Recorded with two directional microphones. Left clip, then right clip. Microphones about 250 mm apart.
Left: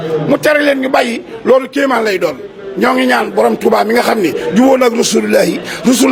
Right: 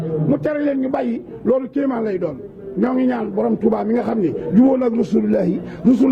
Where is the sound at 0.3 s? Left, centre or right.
Centre.